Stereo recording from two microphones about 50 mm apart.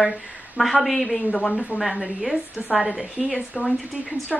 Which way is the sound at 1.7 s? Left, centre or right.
Centre.